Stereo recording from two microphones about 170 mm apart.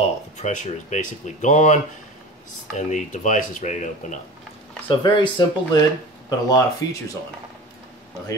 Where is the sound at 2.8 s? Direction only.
45° left (ahead or behind).